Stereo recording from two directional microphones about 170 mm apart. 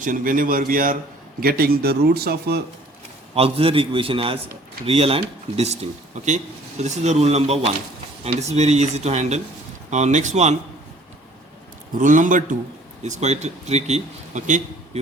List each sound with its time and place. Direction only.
0.0 s speech: 55° right (ahead or behind); by 2.6 s 70° right (ahead or behind)
3.3 s a man's voice: 35° right (ahead or behind)
11.9 s a man's voice: 50° right (ahead or behind)